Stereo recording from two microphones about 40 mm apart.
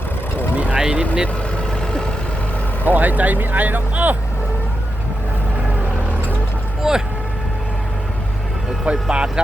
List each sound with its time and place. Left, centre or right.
0.5 s vehicle: right
0.8 s speech: centre
2.8 s speech: right
6.8 s speech: centre
8.9 s speech: right